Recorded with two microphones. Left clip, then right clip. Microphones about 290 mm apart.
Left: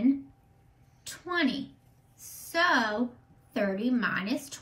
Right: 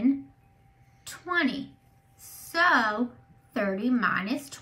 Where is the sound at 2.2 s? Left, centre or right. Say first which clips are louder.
Right 3 dB; centre.